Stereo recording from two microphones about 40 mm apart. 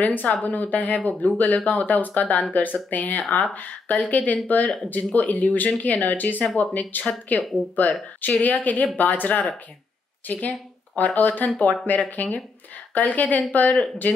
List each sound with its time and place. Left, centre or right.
0.0 s speech: left